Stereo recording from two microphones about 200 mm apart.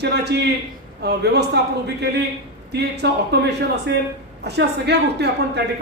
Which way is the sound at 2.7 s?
55° right (ahead or behind).